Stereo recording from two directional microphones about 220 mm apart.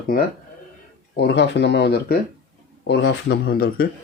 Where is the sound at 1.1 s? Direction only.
50° left (ahead or behind).